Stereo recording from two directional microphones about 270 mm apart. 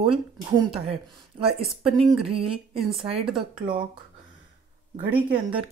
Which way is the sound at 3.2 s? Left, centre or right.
Centre.